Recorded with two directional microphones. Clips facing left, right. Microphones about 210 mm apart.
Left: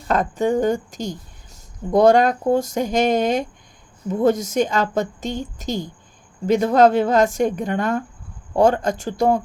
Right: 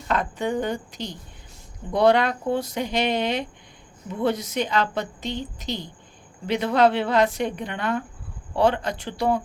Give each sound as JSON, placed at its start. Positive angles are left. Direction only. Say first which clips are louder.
{"t": 0.1, "sound": "a woman's voice", "louder": "left 6 dB", "side_deg": 45}